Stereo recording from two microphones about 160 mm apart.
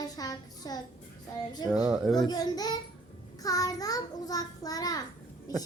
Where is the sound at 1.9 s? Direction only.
Centre (ahead or behind).